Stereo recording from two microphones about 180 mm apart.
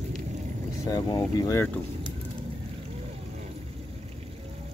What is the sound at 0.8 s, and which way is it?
Speech, 20° left (ahead or behind).